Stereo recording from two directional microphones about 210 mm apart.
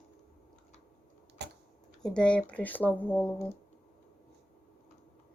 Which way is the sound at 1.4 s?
55° right (ahead or behind).